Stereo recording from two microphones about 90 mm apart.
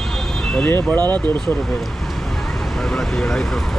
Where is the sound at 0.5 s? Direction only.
20° left (ahead or behind).